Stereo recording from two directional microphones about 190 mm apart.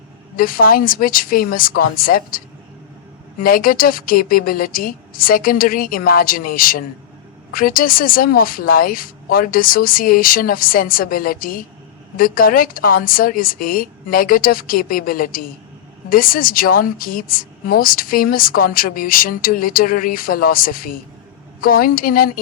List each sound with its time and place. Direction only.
0.3 s a woman's voice: 50° left (ahead or behind)
3.4 s a woman's voice: 50° left (ahead or behind)